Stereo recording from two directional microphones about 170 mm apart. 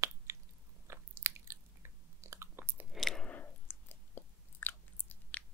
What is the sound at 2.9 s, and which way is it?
Chewing, centre (ahead or behind).